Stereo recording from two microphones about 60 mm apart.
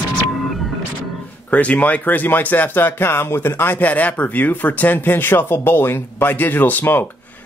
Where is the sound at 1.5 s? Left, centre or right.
Left.